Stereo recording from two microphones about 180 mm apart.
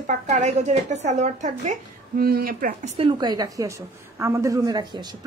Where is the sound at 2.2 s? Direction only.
55° right (ahead or behind).